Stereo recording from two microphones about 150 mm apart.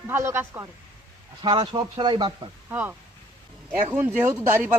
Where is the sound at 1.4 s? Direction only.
30° right (ahead or behind).